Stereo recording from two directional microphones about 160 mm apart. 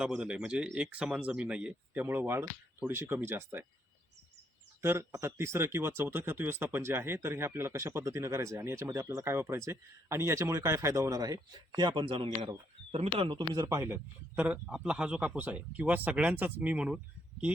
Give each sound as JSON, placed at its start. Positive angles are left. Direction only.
{"t": 0.0, "sound": "speech", "side_deg": -5}
{"t": 4.8, "sound": "speech", "side_deg": -15}